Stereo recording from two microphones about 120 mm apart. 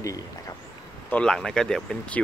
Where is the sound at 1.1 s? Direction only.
5° left (ahead or behind).